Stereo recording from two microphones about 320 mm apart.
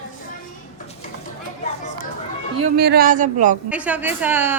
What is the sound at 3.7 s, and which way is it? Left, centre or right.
Speech, centre.